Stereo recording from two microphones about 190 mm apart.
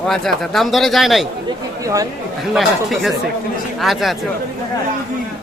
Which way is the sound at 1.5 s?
15° right (ahead or behind).